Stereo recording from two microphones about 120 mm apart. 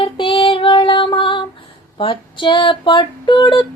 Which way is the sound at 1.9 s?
45° left (ahead or behind).